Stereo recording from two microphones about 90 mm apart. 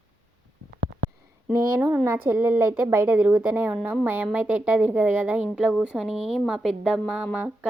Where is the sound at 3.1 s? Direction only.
10° right (ahead or behind).